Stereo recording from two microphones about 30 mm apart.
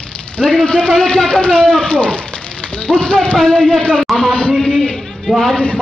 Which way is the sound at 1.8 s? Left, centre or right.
Left.